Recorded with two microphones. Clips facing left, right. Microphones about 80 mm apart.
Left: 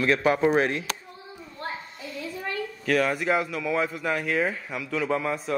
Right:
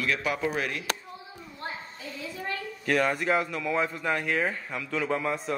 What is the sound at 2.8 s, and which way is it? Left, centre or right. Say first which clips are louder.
Speech: left 1 dB; centre.